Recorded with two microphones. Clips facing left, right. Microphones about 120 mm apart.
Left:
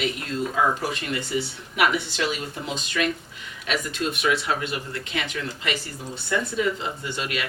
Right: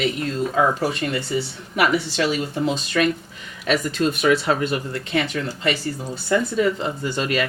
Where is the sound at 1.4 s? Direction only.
35° right (ahead or behind).